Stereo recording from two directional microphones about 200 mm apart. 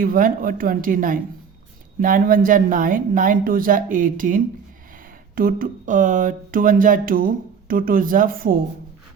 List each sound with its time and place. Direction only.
0.0 s speech: 45° right (ahead or behind)